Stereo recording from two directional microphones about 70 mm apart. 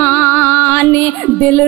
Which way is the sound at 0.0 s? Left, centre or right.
Left.